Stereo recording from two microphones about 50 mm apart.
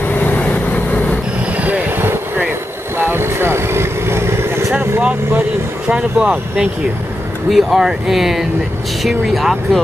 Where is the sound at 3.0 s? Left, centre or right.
Right.